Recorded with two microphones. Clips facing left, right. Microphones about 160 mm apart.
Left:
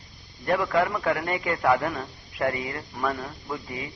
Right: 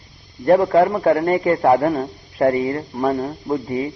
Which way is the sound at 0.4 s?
35° right (ahead or behind).